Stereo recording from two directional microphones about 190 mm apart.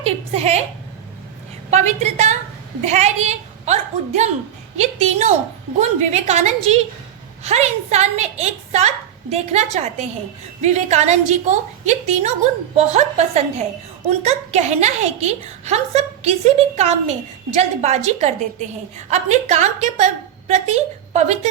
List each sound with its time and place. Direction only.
0.0 s a woman's voice: 35° right (ahead or behind)
1.7 s a woman's voice: 35° right (ahead or behind)